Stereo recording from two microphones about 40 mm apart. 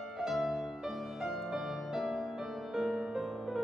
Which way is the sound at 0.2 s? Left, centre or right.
Centre.